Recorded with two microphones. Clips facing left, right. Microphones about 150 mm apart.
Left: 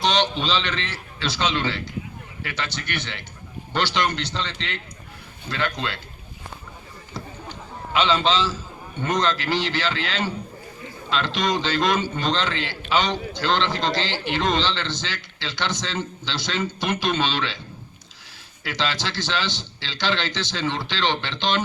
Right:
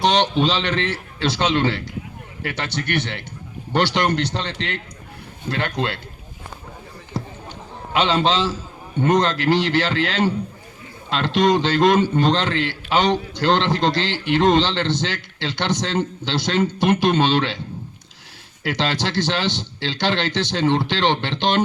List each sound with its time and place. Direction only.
0.0 s a man's voice: 60° right (ahead or behind)
7.9 s a man's voice: 55° right (ahead or behind)
18.6 s a man's voice: 60° right (ahead or behind)